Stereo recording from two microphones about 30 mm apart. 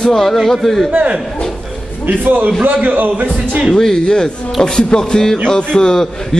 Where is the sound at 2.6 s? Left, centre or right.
Right.